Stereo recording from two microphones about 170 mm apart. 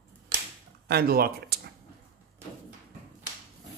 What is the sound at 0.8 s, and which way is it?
Speech, 65° right (ahead or behind).